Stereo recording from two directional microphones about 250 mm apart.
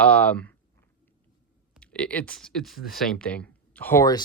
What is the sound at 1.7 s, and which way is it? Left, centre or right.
Speech, centre.